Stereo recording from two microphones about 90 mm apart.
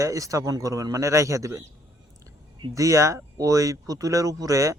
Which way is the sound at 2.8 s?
35° right (ahead or behind).